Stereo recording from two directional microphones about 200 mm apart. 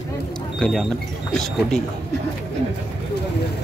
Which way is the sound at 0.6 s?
5° left (ahead or behind).